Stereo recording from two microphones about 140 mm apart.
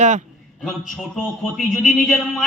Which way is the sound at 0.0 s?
55° right (ahead or behind).